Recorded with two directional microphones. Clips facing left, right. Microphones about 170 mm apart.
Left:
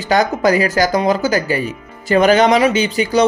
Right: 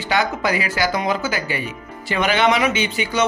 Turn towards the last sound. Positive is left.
turn(degrees=40)  # may be behind; listen again after turning